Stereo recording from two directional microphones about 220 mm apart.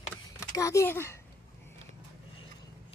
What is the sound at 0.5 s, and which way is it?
Speech, 15° left (ahead or behind).